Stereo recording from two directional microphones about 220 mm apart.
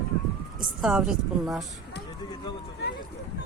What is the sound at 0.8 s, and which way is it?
Speech, 5° right (ahead or behind).